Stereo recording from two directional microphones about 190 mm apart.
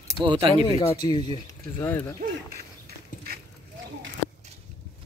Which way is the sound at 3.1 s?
45° left (ahead or behind).